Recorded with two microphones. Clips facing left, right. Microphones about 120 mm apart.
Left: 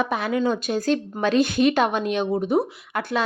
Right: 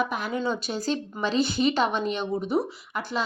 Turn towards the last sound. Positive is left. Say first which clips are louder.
# left 5 dB
turn(degrees=60)  # may be behind; listen again after turning